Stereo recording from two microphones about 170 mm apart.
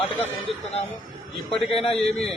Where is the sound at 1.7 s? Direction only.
35° left (ahead or behind).